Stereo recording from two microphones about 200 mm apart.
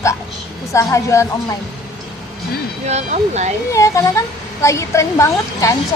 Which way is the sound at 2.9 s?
35° right (ahead or behind).